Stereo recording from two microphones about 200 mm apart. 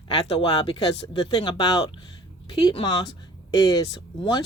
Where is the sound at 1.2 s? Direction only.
15° left (ahead or behind).